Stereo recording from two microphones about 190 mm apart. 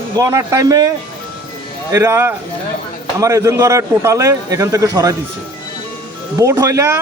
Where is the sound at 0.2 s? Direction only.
15° right (ahead or behind).